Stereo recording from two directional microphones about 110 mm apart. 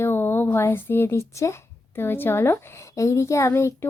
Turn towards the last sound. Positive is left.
turn(degrees=25)  # may be behind; listen again after turning